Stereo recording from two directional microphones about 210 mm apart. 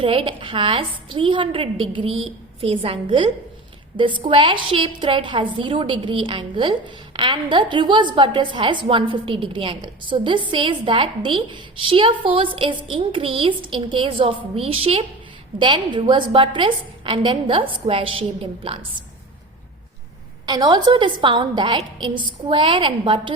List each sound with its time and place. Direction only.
0.0 s a woman's voice: 25° right (ahead or behind)
20.5 s a woman's voice: 20° right (ahead or behind)